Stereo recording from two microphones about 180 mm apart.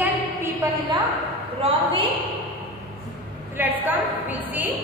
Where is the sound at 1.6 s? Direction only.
30° right (ahead or behind).